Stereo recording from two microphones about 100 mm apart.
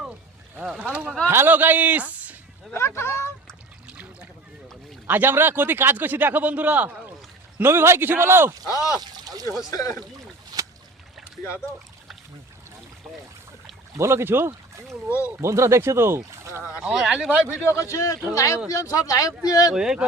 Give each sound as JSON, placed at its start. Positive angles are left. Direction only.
{"t": 0.6, "sound": "a man's voice", "side_deg": -5}
{"t": 2.7, "sound": "speech", "side_deg": 25}
{"t": 5.0, "sound": "a man's voice", "side_deg": -20}
{"t": 8.6, "sound": "a man's voice", "side_deg": 35}
{"t": 9.0, "sound": "speech", "side_deg": -40}
{"t": 9.6, "sound": "a man's voice", "side_deg": 35}
{"t": 10.5, "sound": "a sound", "side_deg": -40}
{"t": 13.9, "sound": "a man's voice", "side_deg": -25}
{"t": 16.8, "sound": "speech", "side_deg": -5}
{"t": 17.6, "sound": "a man's voice", "side_deg": 30}
{"t": 19.7, "sound": "speech", "side_deg": -5}